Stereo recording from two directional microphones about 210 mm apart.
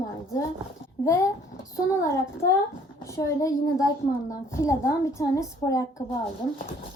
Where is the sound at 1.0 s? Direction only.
15° left (ahead or behind).